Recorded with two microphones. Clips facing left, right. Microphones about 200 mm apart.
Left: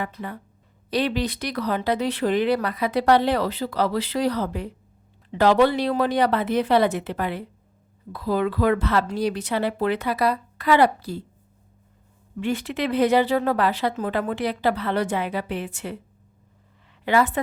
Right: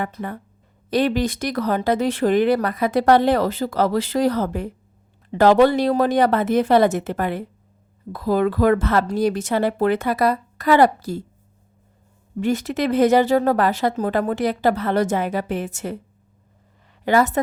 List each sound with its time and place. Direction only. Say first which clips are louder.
0.0 s speech: right 4 dB; 50° right (ahead or behind)
12.4 s speech: right 4 dB; 40° right (ahead or behind)
17.1 s speech: right 3 dB; 45° right (ahead or behind)